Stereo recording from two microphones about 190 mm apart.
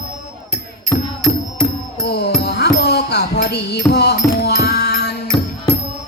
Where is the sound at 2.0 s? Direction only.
60° left (ahead or behind).